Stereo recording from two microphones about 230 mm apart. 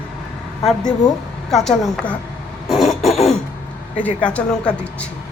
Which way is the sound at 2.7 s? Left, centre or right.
Centre.